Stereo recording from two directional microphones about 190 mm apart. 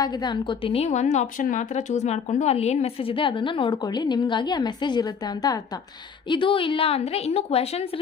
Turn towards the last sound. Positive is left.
turn(degrees=35)  # may be behind; listen again after turning